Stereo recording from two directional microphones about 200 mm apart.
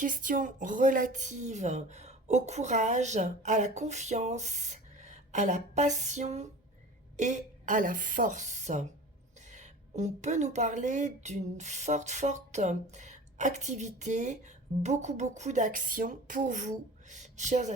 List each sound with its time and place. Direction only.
0.0 s speech: 40° right (ahead or behind)